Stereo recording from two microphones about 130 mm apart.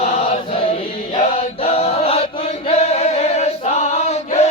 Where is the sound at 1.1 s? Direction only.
55° left (ahead or behind).